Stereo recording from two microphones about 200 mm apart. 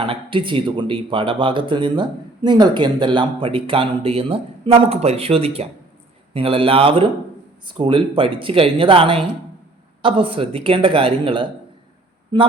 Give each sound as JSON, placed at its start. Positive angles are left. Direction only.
{"t": 0.0, "sound": "speech", "side_deg": -25}